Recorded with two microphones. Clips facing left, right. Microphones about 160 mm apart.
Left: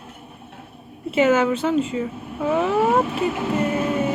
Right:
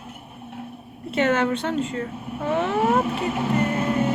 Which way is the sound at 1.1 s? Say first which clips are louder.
Left 4 dB; 5° left (ahead or behind).